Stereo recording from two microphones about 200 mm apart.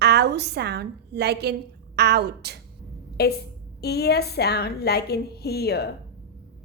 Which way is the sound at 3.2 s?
55° left (ahead or behind).